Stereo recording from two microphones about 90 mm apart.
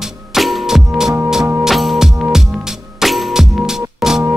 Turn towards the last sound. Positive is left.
turn(degrees=-5)  # may be behind; listen again after turning